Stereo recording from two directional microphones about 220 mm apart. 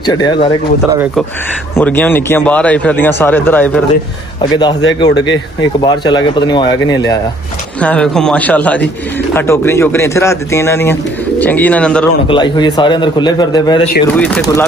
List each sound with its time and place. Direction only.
0.0 s a man's voice: 20° left (ahead or behind)
1.8 s speech: 10° left (ahead or behind)
4.4 s a man's voice: 20° left (ahead or behind)
7.8 s a man's voice: 5° left (ahead or behind)
12.3 s a man's voice: 20° left (ahead or behind)
14.1 s a man's voice: 5° left (ahead or behind)